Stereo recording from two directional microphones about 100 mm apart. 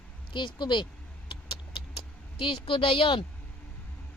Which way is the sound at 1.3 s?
60° left (ahead or behind).